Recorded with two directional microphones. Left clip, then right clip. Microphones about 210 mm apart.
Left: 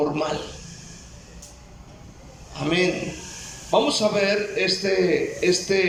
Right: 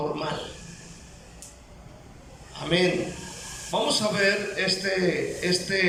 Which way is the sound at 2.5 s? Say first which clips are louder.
Left 1 dB; 20° left (ahead or behind).